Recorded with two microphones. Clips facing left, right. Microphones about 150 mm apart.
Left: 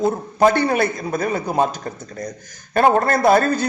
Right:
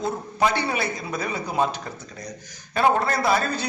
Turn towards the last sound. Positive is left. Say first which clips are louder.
# left 8 dB
turn(degrees=50)  # may be behind; listen again after turning